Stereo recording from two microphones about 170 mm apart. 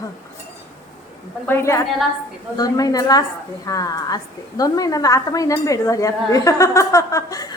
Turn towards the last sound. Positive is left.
turn(degrees=20)  # may be behind; listen again after turning